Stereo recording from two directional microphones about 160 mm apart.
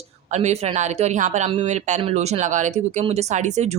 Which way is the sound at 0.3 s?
45° right (ahead or behind).